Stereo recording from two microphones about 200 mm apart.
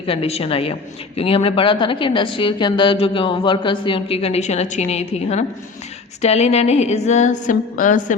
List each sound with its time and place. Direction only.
0.0 s a woman's voice: 30° left (ahead or behind)